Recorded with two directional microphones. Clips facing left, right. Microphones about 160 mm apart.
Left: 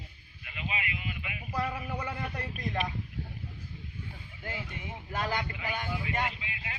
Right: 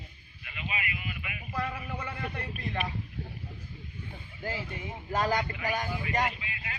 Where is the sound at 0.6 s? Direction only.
25° left (ahead or behind).